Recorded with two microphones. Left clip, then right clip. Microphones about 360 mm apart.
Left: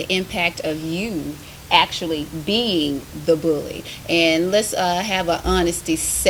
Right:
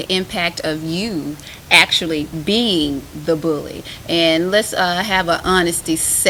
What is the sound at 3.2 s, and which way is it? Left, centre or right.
A woman's voice, right.